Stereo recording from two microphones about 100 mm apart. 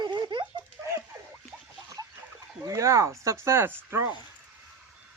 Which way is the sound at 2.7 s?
30° right (ahead or behind).